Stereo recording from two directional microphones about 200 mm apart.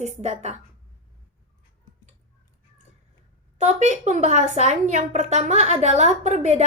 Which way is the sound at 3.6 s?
35° right (ahead or behind).